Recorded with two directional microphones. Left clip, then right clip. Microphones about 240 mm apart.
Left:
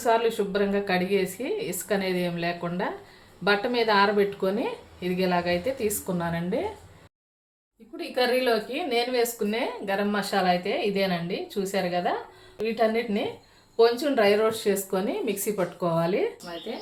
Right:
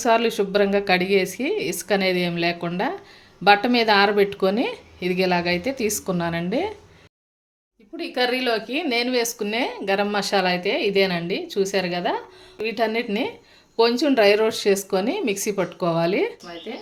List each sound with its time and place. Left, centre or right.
0.0 s speech: right
7.9 s speech: right